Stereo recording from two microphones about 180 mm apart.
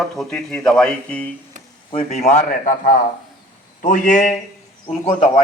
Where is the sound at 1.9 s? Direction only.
35° left (ahead or behind).